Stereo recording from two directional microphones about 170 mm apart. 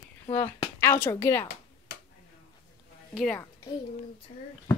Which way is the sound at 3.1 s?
5° left (ahead or behind).